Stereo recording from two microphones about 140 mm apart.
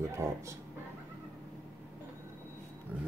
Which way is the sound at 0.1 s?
20° right (ahead or behind).